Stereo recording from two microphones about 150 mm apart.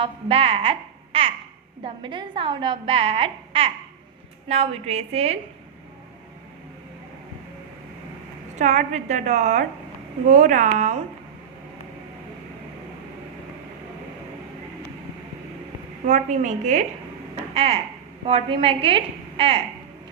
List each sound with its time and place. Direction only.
0.0 s a child's voice: 40° right (ahead or behind)
8.5 s a woman's voice: 50° right (ahead or behind)
16.0 s a woman's voice: 55° right (ahead or behind)
17.3 s a sound: 40° right (ahead or behind)
18.3 s a woman's voice: 35° right (ahead or behind)